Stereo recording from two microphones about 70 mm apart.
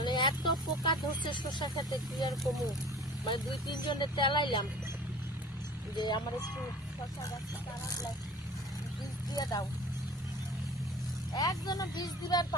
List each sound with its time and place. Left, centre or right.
0.0 s speech: left
6.0 s speech: left
9.3 s speech: left
11.3 s speech: left